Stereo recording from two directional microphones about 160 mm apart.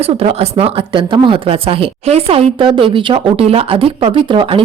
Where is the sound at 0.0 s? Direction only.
40° right (ahead or behind).